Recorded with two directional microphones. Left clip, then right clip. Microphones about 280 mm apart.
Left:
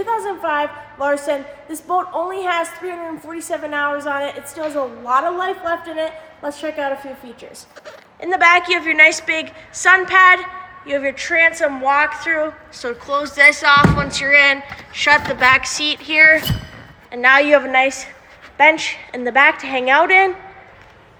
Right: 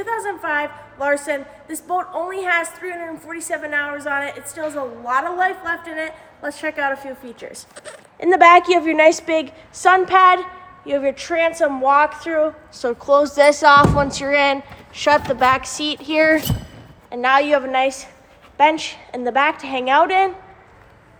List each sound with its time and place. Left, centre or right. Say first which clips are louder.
0.0 s a woman's voice: left 3 dB; centre
8.2 s a woman's voice: right 3 dB; right; by 20.3 s centre